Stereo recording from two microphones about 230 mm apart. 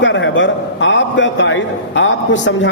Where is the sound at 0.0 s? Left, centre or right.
Left.